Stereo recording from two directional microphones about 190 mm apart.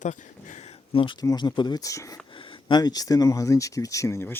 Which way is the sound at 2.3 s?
30° left (ahead or behind).